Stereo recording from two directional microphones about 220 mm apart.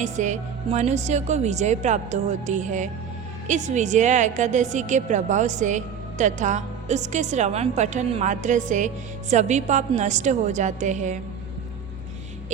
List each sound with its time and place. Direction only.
0.0 s a woman's voice: 35° right (ahead or behind)